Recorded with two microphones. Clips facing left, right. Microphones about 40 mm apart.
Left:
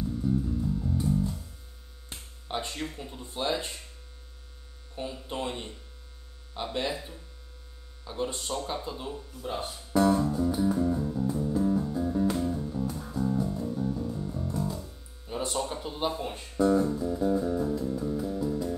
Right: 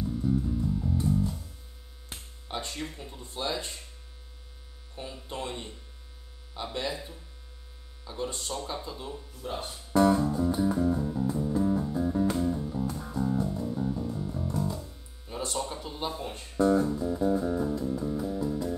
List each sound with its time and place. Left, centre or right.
0.0 s music: centre
2.4 s speech: centre
3.2 s speech: centre
4.9 s speech: centre
8.0 s speech: centre
9.1 s speech: centre
10.2 s music: centre
15.3 s a sound: centre
15.7 s speech: centre
16.6 s music: centre